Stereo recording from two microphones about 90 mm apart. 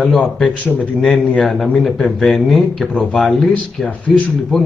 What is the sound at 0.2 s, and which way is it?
A man's voice, 15° left (ahead or behind).